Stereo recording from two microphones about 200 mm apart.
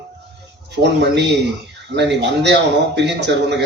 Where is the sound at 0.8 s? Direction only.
60° right (ahead or behind).